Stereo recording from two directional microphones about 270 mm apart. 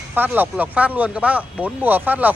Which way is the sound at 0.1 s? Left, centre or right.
Centre.